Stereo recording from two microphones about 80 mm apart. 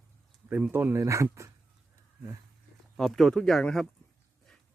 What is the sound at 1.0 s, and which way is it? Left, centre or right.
Speech, right.